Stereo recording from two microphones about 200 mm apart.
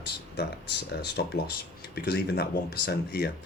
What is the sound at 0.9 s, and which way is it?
Speech, 55° left (ahead or behind).